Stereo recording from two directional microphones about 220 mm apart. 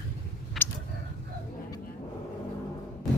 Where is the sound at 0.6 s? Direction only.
Centre (ahead or behind).